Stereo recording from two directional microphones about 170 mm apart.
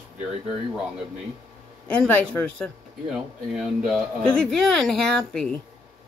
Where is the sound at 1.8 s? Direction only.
10° left (ahead or behind).